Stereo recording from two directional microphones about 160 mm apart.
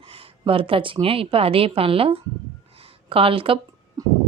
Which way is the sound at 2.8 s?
35° right (ahead or behind).